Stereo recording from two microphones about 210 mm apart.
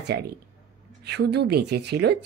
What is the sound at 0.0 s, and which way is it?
A woman's voice, 50° right (ahead or behind).